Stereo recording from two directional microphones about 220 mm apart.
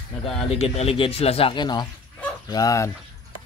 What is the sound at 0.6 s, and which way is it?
A man's voice, 30° left (ahead or behind).